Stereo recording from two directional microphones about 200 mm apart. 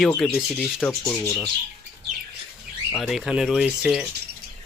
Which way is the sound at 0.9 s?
10° left (ahead or behind).